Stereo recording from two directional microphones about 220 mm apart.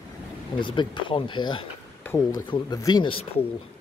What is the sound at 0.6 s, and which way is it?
Speech, 20° left (ahead or behind).